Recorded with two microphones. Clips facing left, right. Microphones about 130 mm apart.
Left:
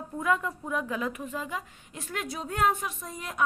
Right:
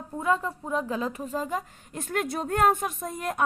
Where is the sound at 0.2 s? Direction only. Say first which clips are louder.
Right 2 dB; 30° right (ahead or behind).